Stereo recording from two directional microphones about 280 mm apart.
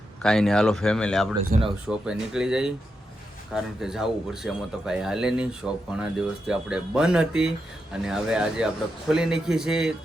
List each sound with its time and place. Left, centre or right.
0.2 s speech: centre
1.5 s speech: right
1.9 s speech: centre